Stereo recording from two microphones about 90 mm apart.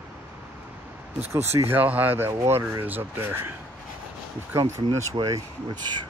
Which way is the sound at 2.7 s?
20° right (ahead or behind).